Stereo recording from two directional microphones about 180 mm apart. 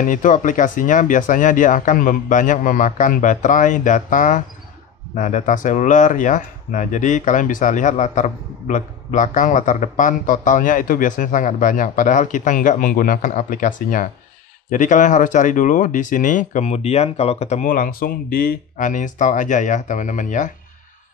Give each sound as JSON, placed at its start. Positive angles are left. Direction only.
{"t": 0.0, "sound": "speech", "side_deg": 45}